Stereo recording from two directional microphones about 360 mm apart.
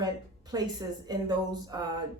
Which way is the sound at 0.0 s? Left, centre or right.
Centre.